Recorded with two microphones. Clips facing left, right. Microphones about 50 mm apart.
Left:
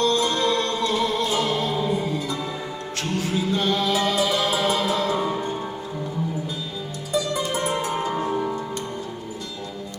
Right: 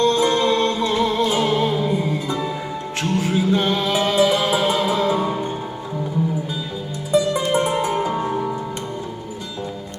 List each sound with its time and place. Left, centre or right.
0.0 s music: right
7.5 s music: right
8.3 s music: centre